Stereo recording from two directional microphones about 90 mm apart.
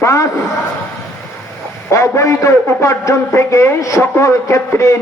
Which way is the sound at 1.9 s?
35° left (ahead or behind).